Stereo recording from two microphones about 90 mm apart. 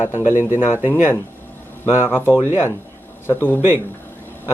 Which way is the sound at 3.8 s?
20° left (ahead or behind).